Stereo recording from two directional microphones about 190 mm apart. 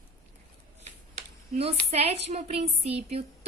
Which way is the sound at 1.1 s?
35° right (ahead or behind).